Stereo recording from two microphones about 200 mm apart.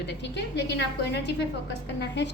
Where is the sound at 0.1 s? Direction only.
60° left (ahead or behind).